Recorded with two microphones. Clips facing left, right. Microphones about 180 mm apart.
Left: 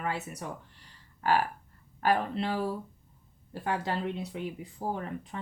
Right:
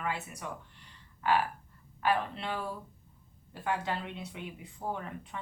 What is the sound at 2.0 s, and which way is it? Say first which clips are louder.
Speech: left 3 dB; 40° left (ahead or behind).